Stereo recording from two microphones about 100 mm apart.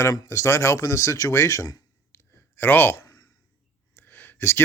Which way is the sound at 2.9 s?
30° left (ahead or behind).